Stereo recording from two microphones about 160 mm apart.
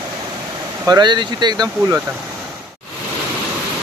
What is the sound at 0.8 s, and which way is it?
Speech, 25° right (ahead or behind).